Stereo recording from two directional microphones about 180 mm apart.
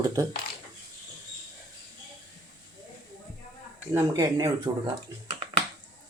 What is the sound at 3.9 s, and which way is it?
Speech, 15° right (ahead or behind).